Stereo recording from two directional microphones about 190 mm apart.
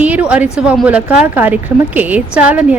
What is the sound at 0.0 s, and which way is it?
A woman's voice, 5° right (ahead or behind).